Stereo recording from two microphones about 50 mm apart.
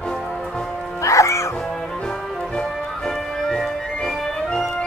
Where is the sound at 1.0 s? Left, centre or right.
Left.